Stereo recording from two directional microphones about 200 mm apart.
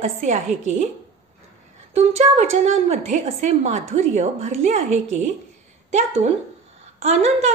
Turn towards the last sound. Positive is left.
turn(degrees=-35)  # may be behind; listen again after turning